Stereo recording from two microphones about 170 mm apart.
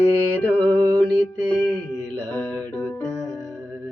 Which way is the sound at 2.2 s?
10° left (ahead or behind).